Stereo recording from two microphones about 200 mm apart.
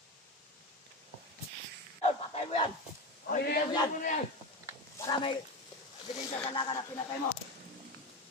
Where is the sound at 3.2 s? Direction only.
50° left (ahead or behind).